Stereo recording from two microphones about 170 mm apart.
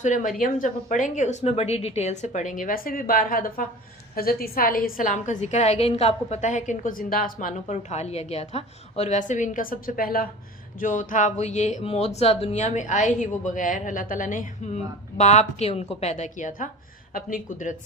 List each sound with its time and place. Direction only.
0.0 s a woman's voice: 50° left (ahead or behind)